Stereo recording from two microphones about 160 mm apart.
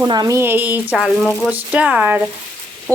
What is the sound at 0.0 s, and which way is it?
Speech, 25° right (ahead or behind).